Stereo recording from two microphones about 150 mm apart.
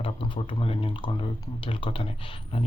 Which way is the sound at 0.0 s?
35° left (ahead or behind).